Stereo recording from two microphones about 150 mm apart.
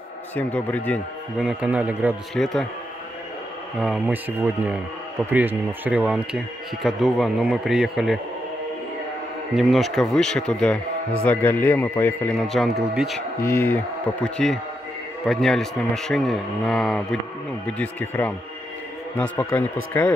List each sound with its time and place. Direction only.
0.4 s speech: 10° left (ahead or behind)
1.4 s speech: 5° right (ahead or behind)
2.3 s speech: 5° left (ahead or behind)
3.8 s speech: 5° right (ahead or behind)
9.6 s speech: centre (ahead or behind)
12.4 s speech: centre (ahead or behind)
13.4 s speech: 15° left (ahead or behind)